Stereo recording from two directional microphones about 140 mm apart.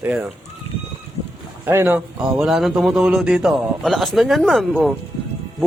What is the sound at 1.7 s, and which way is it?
Speech, 15° right (ahead or behind).